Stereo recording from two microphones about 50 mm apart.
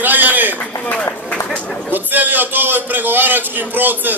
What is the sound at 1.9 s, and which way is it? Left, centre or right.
A man's voice, right.